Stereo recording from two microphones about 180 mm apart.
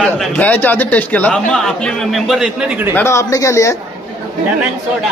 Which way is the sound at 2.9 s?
15° left (ahead or behind).